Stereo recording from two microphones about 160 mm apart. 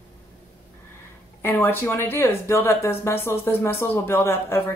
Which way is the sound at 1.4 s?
15° left (ahead or behind).